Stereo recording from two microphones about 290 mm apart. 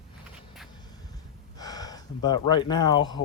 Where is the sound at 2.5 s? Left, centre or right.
Centre.